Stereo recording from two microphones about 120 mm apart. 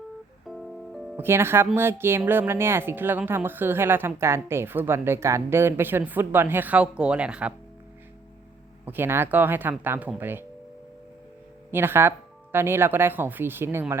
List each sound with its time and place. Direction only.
0.4 s music: centre (ahead or behind)
1.1 s speech: 20° right (ahead or behind)
8.9 s speech: 20° right (ahead or behind)
11.7 s speech: 20° right (ahead or behind)